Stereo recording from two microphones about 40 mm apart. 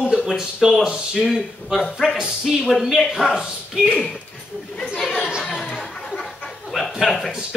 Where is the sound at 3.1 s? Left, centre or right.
Centre.